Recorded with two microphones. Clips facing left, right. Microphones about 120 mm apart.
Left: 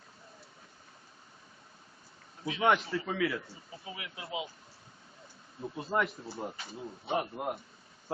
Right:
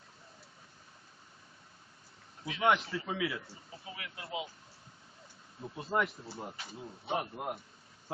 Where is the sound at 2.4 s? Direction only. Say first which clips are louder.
Left 4 dB; 25° left (ahead or behind).